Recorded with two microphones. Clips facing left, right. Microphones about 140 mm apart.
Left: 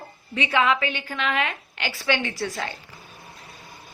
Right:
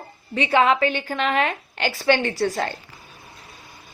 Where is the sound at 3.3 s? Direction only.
Centre (ahead or behind).